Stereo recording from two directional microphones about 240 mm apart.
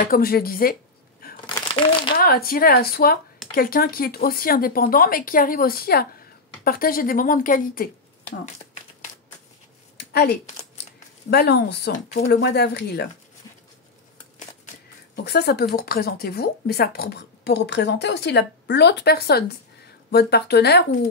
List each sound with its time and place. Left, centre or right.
0.1 s speech: left
1.7 s speech: left
2.1 s speech: left
9.9 s a sound: left
11.2 s speech: left
12.1 s speech: left
12.4 s speech: left
15.2 s speech: left